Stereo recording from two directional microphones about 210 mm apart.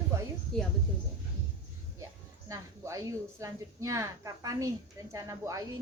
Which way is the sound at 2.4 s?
15° right (ahead or behind).